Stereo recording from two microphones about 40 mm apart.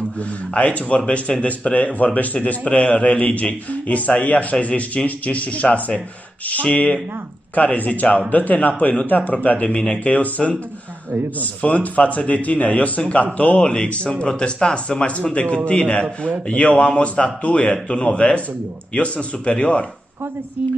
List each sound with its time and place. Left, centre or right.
0.6 s speech: left
11.6 s speech: left
13.6 s speech: left